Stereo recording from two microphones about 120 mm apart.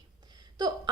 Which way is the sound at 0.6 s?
35° right (ahead or behind).